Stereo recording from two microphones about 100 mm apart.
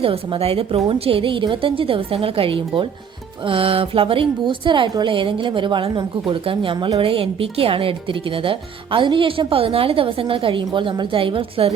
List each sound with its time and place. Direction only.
0.0 s speech: 65° right (ahead or behind); by 7.0 s 50° right (ahead or behind)
7.0 s speech: 65° right (ahead or behind)